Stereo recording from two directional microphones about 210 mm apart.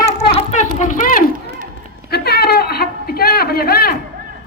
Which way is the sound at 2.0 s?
50° left (ahead or behind).